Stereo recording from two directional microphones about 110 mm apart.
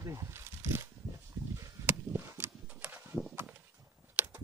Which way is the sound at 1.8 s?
20° right (ahead or behind).